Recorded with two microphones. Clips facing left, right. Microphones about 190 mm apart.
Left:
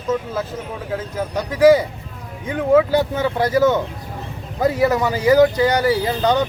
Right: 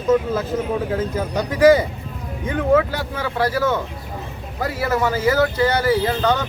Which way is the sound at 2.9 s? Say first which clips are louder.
Left 7 dB; 20° left (ahead or behind).